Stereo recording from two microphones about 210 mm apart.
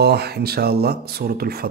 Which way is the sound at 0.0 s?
50° right (ahead or behind).